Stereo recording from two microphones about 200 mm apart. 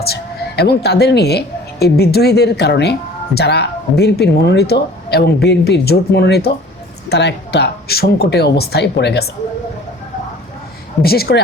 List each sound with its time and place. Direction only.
0.0 s speech: 50° left (ahead or behind)
11.0 s speech: 50° left (ahead or behind)